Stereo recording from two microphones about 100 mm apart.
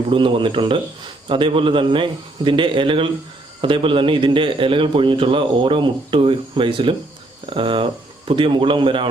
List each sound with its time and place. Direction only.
0.1 s a man's voice: 60° right (ahead or behind)